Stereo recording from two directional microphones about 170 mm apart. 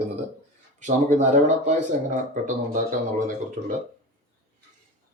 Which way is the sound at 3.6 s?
50° right (ahead or behind).